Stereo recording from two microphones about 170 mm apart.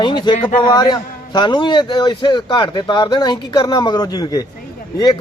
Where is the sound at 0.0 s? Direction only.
25° left (ahead or behind).